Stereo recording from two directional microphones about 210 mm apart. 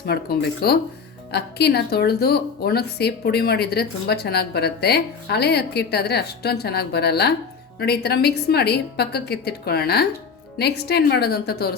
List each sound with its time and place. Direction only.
0.0 s speech: 50° left (ahead or behind)